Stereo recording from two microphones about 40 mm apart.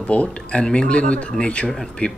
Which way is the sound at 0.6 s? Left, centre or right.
Left.